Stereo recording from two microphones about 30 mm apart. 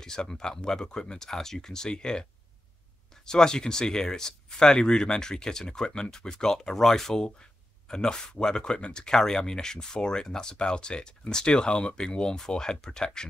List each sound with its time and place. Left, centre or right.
0.0 s speech: left
3.3 s speech: left
7.2 s speech: left
10.6 s speech: left